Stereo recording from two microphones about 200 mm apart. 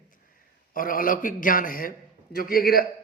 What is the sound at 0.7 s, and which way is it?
A man's voice, 45° left (ahead or behind).